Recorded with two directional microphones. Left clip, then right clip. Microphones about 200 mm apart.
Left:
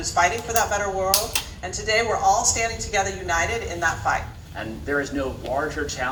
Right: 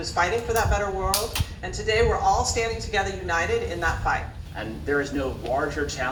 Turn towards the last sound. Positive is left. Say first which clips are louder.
# left 1 dB
turn(degrees=40)  # may be behind; listen again after turning